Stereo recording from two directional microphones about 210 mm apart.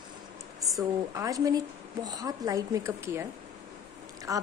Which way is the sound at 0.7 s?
15° right (ahead or behind).